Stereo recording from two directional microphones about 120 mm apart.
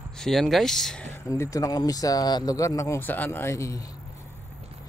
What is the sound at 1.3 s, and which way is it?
Speech, 30° left (ahead or behind).